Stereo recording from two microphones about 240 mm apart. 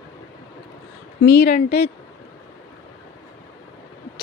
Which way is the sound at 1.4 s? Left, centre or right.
Left.